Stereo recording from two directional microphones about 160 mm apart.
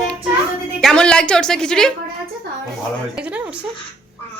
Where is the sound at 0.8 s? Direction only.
5° left (ahead or behind).